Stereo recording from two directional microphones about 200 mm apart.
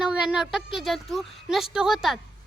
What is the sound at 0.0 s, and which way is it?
A child's voice, 5° right (ahead or behind).